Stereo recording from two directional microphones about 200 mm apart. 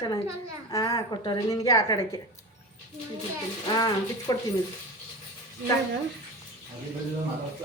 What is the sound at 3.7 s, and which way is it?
Speech, 20° left (ahead or behind).